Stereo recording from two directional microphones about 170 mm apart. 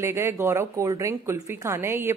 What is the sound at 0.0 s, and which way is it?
A woman's voice, 15° right (ahead or behind).